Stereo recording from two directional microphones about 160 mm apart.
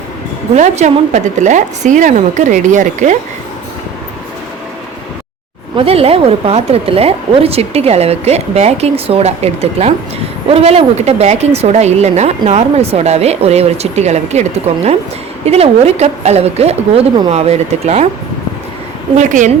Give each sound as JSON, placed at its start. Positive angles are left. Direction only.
{"t": 0.5, "sound": "a woman's voice", "side_deg": -45}
{"t": 5.7, "sound": "speech", "side_deg": -35}
{"t": 19.1, "sound": "a woman's voice", "side_deg": -50}